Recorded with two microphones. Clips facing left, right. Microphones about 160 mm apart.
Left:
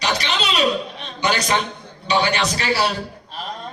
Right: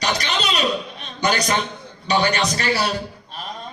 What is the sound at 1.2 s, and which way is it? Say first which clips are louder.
A man's voice: even; 40° right (ahead or behind).